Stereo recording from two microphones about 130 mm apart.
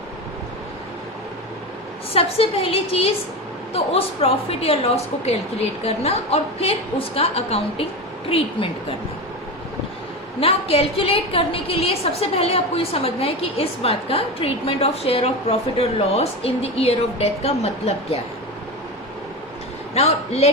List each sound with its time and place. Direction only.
2.1 s a woman's voice: 45° left (ahead or behind)
10.4 s a woman's voice: 45° left (ahead or behind)
19.9 s a man's voice: 55° left (ahead or behind)